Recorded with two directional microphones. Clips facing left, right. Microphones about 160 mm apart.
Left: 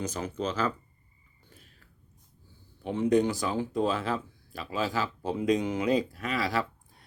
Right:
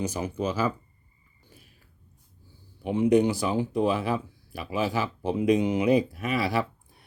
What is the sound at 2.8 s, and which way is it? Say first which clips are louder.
Speech: right 3 dB; 15° right (ahead or behind).